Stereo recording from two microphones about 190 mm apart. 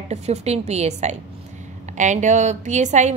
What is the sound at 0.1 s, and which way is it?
A woman's voice, 35° right (ahead or behind).